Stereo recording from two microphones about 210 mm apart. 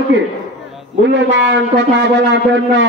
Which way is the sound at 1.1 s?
60° right (ahead or behind).